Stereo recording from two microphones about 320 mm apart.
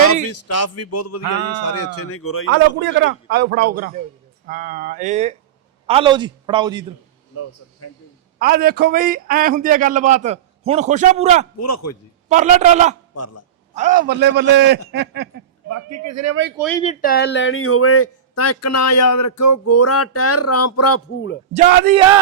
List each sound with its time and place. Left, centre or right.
0.1 s a man's voice: left
2.8 s a man's voice: right; by 6.8 s centre
8.4 s a man's voice: right
11.6 s a man's voice: left
12.3 s a man's voice: right
13.1 s speech: left
13.7 s a man's voice: right
15.7 s a man's voice: right
16.6 s speech: centre
16.8 s speech: left
21.5 s a man's voice: right
21.9 s a man's voice: centre